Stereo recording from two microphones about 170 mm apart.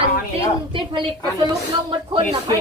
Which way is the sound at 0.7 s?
30° right (ahead or behind).